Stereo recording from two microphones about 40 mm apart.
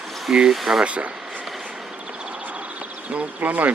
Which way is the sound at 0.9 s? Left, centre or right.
Right.